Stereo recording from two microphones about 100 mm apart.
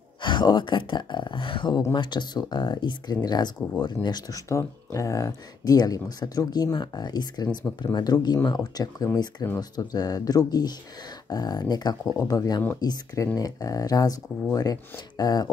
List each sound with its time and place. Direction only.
0.2 s speech: 50° left (ahead or behind)